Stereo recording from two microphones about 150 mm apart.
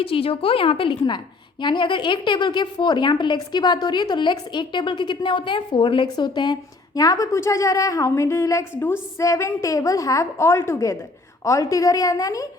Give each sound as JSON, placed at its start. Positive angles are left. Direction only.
{"t": 0.0, "sound": "a woman's voice", "side_deg": 40}